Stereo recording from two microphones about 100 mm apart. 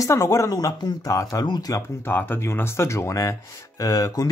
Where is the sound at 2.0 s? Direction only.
20° left (ahead or behind).